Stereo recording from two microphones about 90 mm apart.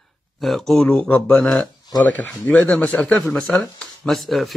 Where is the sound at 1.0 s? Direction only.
15° left (ahead or behind).